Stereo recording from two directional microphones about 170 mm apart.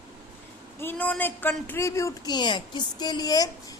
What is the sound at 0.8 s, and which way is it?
A woman's voice, 10° left (ahead or behind).